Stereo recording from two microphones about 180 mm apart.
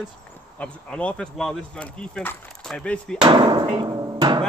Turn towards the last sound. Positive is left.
turn(degrees=-25)  # may be behind; listen again after turning